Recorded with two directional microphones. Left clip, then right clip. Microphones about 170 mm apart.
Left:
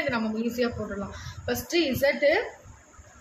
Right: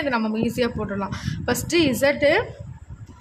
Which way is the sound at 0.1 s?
50° right (ahead or behind).